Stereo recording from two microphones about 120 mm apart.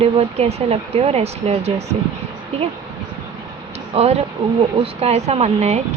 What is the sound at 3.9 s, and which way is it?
Speech, 60° right (ahead or behind).